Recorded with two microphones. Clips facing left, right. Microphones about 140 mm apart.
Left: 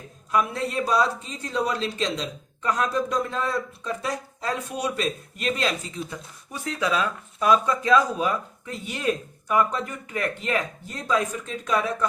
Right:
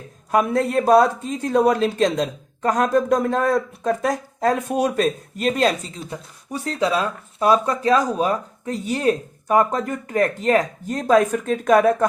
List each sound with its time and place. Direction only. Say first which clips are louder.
0.3 s speech: right 6 dB; 50° right (ahead or behind)